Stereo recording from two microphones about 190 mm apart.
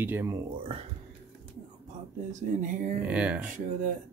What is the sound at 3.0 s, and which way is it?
Speech, 5° right (ahead or behind).